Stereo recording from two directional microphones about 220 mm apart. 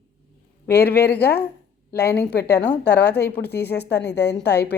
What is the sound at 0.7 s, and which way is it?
A woman's voice, 45° left (ahead or behind).